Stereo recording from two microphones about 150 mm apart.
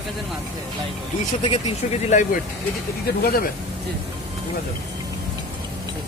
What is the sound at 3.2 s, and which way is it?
Speech, 85° left.